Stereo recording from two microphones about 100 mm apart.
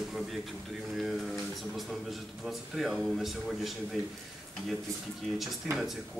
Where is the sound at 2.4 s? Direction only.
Centre (ahead or behind).